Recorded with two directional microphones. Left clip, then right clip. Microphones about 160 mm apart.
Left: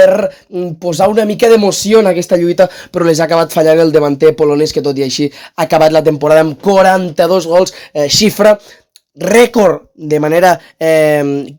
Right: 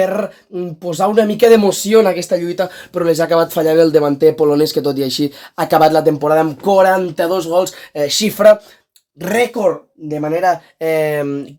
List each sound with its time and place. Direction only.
0.1 s speech: 35° left (ahead or behind)
1.8 s speech: 35° left (ahead or behind)
4.4 s speech: 25° left (ahead or behind)
6.4 s speech: 50° left (ahead or behind)
10.1 s speech: 60° left (ahead or behind)
10.8 s speech: 40° left (ahead or behind)